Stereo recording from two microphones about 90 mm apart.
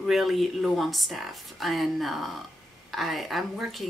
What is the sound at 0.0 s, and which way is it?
Speech, centre (ahead or behind).